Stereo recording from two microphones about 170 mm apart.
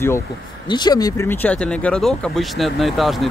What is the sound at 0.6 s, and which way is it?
Speech, 25° left (ahead or behind).